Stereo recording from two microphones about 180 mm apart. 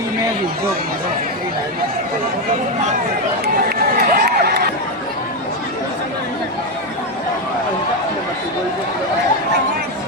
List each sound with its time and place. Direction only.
3.4 s run: 60° right (ahead or behind)